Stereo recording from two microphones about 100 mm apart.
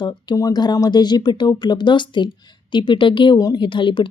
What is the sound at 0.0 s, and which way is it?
Speech, 45° left (ahead or behind).